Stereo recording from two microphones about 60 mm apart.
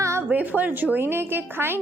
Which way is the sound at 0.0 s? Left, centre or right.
Right.